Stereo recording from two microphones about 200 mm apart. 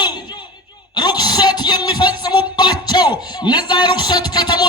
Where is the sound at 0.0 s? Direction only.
20° left (ahead or behind).